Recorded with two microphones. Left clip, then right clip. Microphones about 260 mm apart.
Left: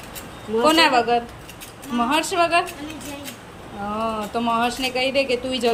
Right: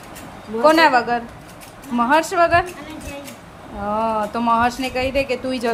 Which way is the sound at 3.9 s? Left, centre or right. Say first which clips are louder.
Right 5 dB; centre.